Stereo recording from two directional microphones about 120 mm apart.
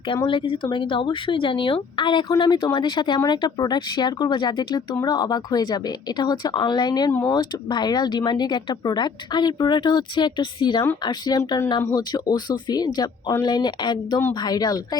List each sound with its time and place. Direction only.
0.3 s speech: 45° left (ahead or behind)
7.1 s speech: 15° left (ahead or behind)
7.3 s speech: 35° left (ahead or behind)